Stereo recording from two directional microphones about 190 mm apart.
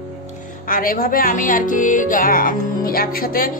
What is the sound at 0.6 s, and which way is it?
Speech, 50° left (ahead or behind).